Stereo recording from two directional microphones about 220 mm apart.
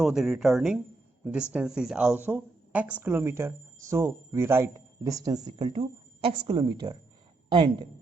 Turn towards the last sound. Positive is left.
turn(degrees=-20)  # may be behind; listen again after turning